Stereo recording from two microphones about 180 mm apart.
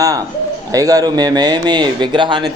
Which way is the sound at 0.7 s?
20° right (ahead or behind).